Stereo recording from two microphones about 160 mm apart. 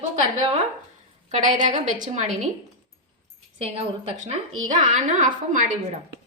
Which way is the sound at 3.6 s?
40° right (ahead or behind).